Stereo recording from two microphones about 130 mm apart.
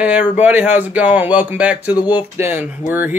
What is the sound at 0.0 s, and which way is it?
Speech, 10° right (ahead or behind).